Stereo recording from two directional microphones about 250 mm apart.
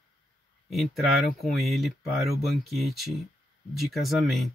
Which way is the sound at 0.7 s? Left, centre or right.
Centre.